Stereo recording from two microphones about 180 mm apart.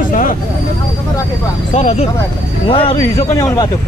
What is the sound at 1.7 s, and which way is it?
Speech, 35° left (ahead or behind).